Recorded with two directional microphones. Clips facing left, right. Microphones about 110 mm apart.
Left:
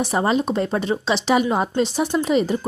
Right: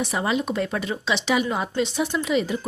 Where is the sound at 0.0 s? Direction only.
35° left (ahead or behind).